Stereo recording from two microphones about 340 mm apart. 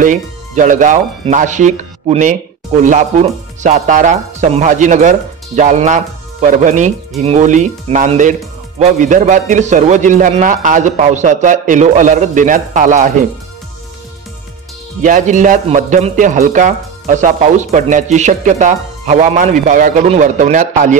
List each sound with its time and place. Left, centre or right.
0.0 s speech: right
15.0 s speech: right